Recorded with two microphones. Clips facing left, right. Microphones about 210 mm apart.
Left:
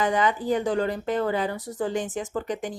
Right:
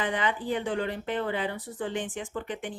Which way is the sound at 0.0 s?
40° left (ahead or behind).